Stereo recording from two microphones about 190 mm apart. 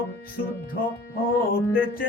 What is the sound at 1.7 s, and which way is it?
Music, 50° left (ahead or behind).